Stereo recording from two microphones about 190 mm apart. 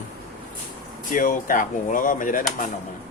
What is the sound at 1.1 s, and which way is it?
Speech, 45° left (ahead or behind).